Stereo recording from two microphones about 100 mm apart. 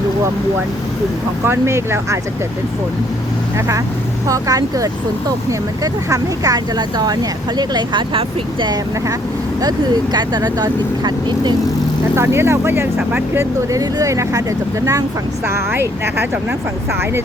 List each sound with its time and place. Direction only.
1.5 s speech: 25° right (ahead or behind)
4.3 s speech: 35° right (ahead or behind)
12.1 s speech: 25° right (ahead or behind)
13.7 s speech: 30° right (ahead or behind)
15.4 s speech: 25° right (ahead or behind)